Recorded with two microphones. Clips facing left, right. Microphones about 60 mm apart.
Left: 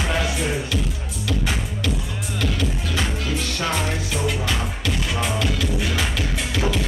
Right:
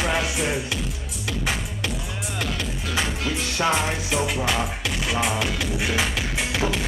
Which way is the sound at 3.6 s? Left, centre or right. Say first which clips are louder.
Right 5 dB; centre.